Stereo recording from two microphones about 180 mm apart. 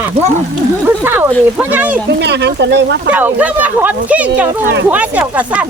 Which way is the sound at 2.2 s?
70° right (ahead or behind).